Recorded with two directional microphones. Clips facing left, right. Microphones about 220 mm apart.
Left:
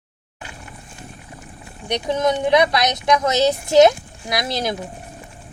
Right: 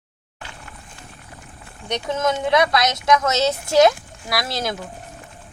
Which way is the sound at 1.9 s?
15° left (ahead or behind).